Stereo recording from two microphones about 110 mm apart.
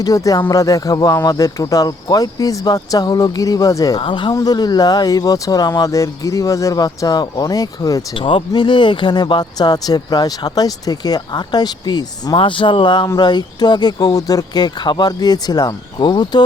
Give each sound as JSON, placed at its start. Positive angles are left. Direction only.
{"t": 0.0, "sound": "speech", "side_deg": 30}
{"t": 4.0, "sound": "speech", "side_deg": 45}
{"t": 8.1, "sound": "speech", "side_deg": 50}